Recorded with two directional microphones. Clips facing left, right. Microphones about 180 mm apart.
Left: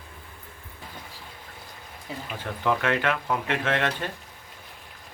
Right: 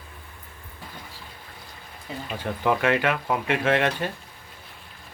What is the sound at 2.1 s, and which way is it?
Speech, centre (ahead or behind).